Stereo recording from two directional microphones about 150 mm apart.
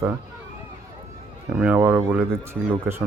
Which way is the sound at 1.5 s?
10° right (ahead or behind).